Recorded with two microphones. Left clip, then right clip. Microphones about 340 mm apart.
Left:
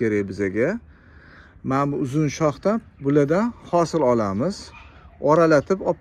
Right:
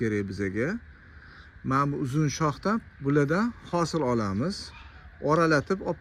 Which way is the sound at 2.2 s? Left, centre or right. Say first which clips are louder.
Left 7 dB; centre.